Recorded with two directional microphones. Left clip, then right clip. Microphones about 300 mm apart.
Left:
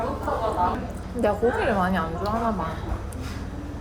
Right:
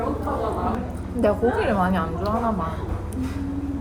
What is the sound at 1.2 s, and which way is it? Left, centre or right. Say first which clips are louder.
Speech: right 2 dB; centre.